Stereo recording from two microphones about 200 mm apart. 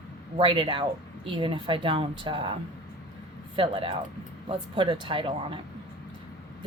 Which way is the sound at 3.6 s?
25° right (ahead or behind).